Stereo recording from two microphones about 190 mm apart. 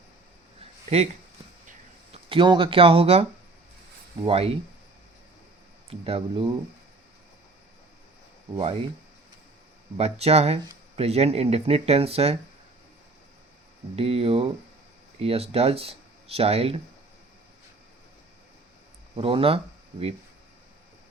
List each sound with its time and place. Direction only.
2.1 s speech: 25° right (ahead or behind)
5.9 s speech: 30° right (ahead or behind)
8.5 s speech: 30° right (ahead or behind)
10.0 s speech: 35° right (ahead or behind)
13.9 s speech: 30° right (ahead or behind)
19.1 s speech: 30° right (ahead or behind)